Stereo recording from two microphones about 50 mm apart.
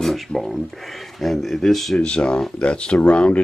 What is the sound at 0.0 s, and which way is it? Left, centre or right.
Speech, centre.